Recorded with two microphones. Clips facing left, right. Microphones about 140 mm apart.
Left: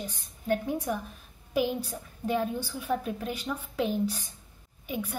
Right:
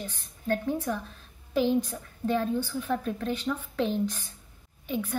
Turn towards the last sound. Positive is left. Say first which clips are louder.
# right 3 dB
turn(degrees=10)  # may be behind; listen again after turning